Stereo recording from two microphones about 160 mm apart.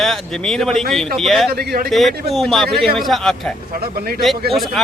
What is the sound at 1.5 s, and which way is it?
Speech, 75° right (ahead or behind).